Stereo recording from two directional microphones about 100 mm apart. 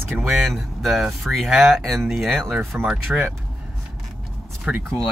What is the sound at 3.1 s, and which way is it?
Speech, 15° right (ahead or behind).